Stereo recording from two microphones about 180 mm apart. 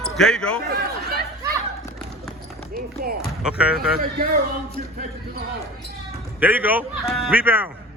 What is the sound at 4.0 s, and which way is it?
Speech, 55° right (ahead or behind).